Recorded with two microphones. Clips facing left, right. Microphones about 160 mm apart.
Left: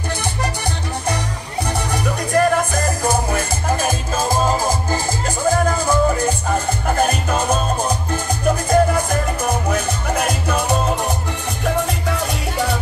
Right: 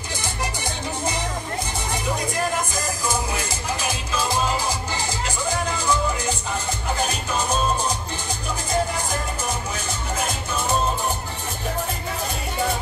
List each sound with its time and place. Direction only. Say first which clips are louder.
1.0 s music: left 2 dB; 60° left (ahead or behind)
11.6 s music: left 8 dB; 80° left